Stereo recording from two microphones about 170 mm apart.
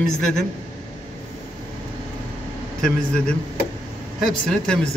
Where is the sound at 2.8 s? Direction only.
5° left (ahead or behind).